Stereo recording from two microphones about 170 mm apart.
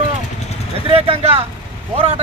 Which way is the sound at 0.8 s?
35° right (ahead or behind).